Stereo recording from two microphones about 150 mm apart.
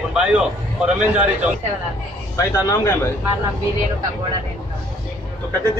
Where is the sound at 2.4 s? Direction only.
20° left (ahead or behind).